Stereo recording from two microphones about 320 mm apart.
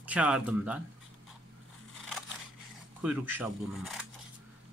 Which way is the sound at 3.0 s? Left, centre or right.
Centre.